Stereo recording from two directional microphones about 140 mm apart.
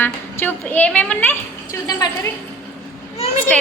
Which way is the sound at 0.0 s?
15° left (ahead or behind).